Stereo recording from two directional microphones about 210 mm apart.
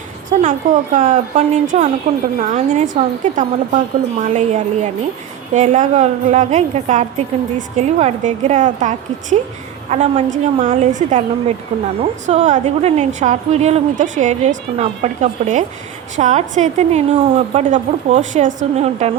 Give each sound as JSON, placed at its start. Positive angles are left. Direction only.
{"t": 0.3, "sound": "a woman's voice", "side_deg": -35}